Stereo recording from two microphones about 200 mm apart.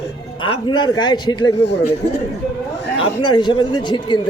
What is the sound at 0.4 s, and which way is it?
A man's voice, 25° left (ahead or behind).